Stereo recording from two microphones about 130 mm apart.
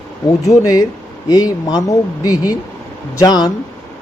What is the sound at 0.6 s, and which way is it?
Speech, 30° left (ahead or behind).